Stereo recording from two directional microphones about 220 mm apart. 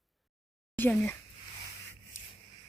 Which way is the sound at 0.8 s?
10° left (ahead or behind).